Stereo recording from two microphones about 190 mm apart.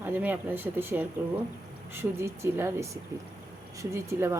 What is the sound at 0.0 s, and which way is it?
A woman's voice, 10° right (ahead or behind).